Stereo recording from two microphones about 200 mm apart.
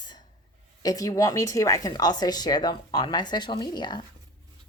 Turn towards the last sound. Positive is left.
turn(degrees=20)  # may be behind; listen again after turning